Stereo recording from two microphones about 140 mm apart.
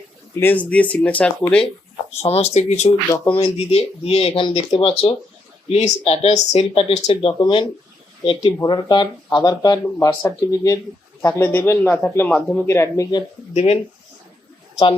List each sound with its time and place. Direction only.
0.3 s speech: 10° left (ahead or behind)
2.0 s speech: 50° left (ahead or behind); by 12.6 s 5° left (ahead or behind)
12.6 s speech: 20° left (ahead or behind)
13.5 s speech: 55° left (ahead or behind)